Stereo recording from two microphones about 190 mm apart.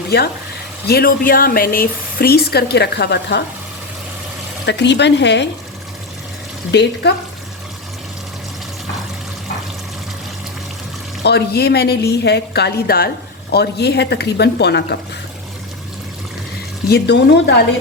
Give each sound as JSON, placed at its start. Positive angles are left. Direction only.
{"t": 0.9, "sound": "speech", "side_deg": 55}
{"t": 4.6, "sound": "speech", "side_deg": 65}
{"t": 6.7, "sound": "speech", "side_deg": 65}
{"t": 11.2, "sound": "speech", "side_deg": 60}
{"t": 16.9, "sound": "speech", "side_deg": 65}